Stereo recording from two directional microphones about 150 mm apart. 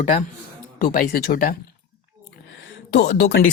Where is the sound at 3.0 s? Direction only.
90° left.